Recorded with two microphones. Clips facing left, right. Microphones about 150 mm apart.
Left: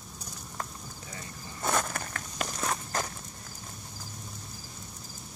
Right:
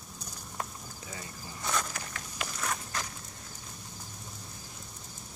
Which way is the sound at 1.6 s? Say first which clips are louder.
Left 5 dB; 50° left (ahead or behind).